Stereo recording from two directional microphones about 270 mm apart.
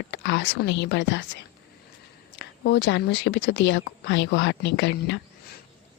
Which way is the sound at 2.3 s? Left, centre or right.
Left.